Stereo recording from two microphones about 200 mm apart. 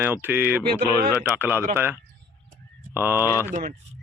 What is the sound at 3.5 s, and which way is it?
Speech, 35° right (ahead or behind).